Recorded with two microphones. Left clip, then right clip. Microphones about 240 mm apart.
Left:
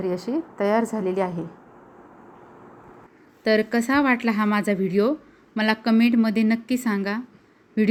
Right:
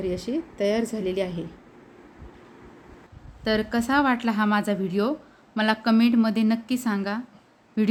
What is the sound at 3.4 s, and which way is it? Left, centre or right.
Speech, centre.